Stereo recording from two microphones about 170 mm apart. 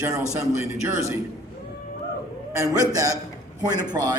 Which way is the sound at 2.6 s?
20° right (ahead or behind).